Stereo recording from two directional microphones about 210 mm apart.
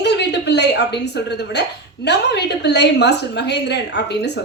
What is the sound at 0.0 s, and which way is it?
Chuckle, 55° left (ahead or behind).